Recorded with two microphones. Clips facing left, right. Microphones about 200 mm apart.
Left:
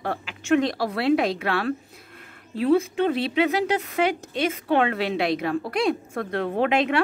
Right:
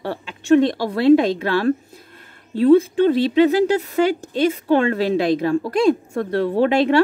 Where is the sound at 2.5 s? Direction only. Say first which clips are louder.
Right 7 dB; 30° right (ahead or behind).